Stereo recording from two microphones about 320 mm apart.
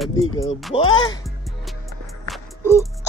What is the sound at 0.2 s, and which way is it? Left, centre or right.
Speech, left.